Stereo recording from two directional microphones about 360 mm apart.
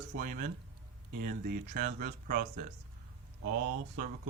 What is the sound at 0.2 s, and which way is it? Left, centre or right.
Speech, right.